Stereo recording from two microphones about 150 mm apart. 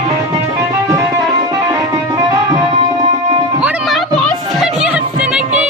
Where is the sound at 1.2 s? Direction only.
25° right (ahead or behind).